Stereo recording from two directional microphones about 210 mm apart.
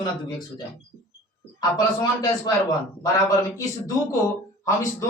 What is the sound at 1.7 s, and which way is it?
A man's voice, 20° left (ahead or behind).